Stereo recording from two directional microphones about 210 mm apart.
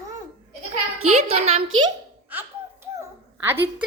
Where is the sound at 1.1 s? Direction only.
30° right (ahead or behind).